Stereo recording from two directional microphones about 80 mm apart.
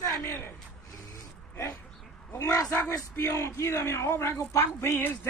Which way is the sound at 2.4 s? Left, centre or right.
Left.